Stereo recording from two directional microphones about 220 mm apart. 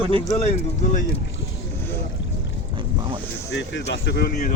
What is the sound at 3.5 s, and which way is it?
Speech, 55° left (ahead or behind).